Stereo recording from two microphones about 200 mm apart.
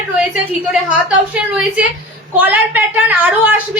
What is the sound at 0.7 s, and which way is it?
A woman's voice, 5° right (ahead or behind).